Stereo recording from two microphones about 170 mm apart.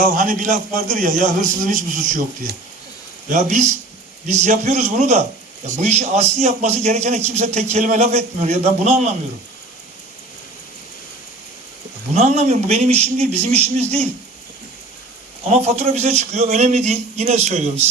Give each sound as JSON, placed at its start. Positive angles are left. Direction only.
{"t": 0.2, "sound": "a man's voice", "side_deg": -50}
{"t": 3.2, "sound": "a man's voice", "side_deg": -45}
{"t": 12.1, "sound": "a man's voice", "side_deg": -40}
{"t": 15.4, "sound": "a man's voice", "side_deg": -40}